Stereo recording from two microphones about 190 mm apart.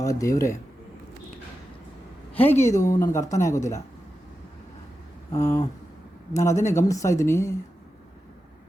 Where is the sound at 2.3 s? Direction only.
10° left (ahead or behind).